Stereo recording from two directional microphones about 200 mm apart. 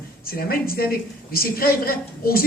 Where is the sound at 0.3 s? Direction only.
45° left (ahead or behind).